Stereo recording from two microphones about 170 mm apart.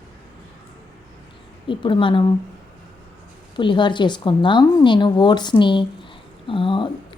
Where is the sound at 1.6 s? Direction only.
30° left (ahead or behind).